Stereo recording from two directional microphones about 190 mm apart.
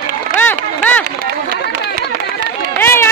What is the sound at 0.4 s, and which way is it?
Music, 10° left (ahead or behind).